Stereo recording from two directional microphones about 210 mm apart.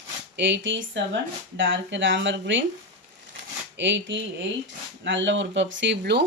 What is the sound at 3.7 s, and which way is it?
Speech, 55° right (ahead or behind).